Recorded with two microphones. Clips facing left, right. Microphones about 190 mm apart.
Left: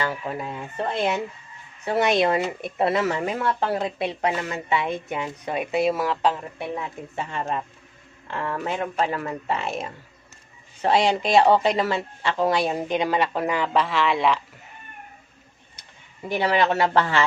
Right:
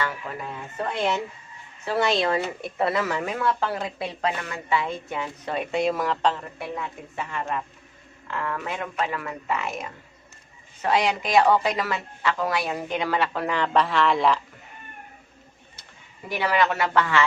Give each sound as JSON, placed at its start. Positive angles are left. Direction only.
{"t": 0.3, "sound": "a man's voice", "side_deg": 30}
{"t": 6.6, "sound": "a man's voice", "side_deg": 25}
{"t": 13.7, "sound": "speech", "side_deg": 0}
{"t": 16.3, "sound": "speech", "side_deg": 25}